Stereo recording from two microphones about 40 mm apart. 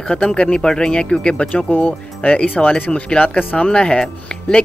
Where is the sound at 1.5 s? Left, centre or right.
Left.